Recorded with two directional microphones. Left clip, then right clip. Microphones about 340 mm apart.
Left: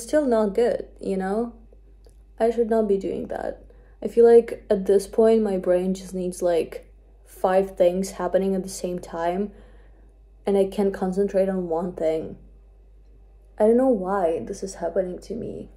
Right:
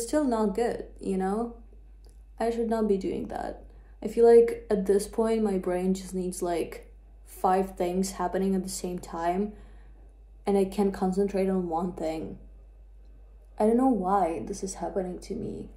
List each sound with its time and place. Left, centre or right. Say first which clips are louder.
0.1 s a woman's voice: left 7 dB; centre
7.2 s a sound: left 4 dB; centre
7.7 s a woman's voice: left 9 dB; centre
13.6 s a woman's voice: left 6 dB; centre